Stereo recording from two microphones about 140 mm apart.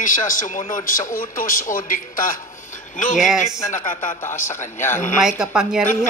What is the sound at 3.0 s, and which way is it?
Speech, 60° left (ahead or behind).